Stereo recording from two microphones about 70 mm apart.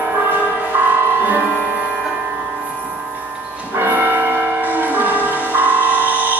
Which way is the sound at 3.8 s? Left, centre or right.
Right.